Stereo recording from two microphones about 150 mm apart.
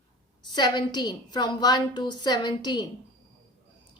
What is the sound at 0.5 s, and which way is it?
A woman's voice, 30° left (ahead or behind).